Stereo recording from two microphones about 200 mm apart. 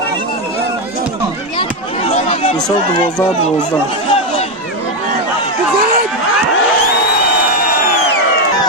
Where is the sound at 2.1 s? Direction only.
30° left (ahead or behind).